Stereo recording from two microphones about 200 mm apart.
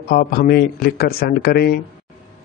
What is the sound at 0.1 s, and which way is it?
A man's voice, 45° left (ahead or behind).